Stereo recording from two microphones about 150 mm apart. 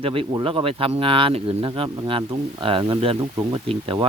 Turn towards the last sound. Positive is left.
turn(degrees=-40)  # may be behind; listen again after turning